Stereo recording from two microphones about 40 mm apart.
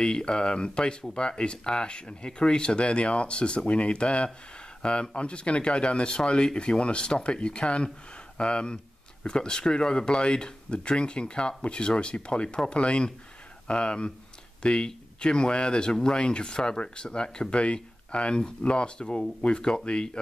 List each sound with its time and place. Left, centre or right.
0.0 s speech: left